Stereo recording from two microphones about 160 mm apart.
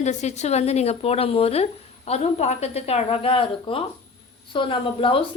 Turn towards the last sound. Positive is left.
turn(degrees=35)  # may be behind; listen again after turning